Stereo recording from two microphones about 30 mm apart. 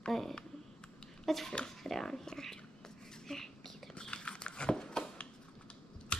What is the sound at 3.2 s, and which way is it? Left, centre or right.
Whispering, centre.